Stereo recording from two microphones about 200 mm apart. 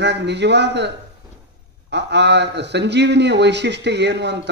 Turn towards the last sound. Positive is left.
turn(degrees=-60)  # may be behind; listen again after turning